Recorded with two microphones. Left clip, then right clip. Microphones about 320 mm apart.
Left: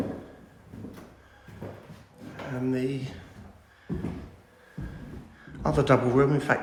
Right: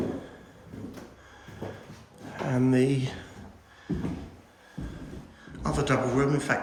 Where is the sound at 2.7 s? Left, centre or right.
Right.